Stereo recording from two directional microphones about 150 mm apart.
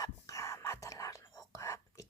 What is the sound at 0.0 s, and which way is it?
Whispering, 20° left (ahead or behind).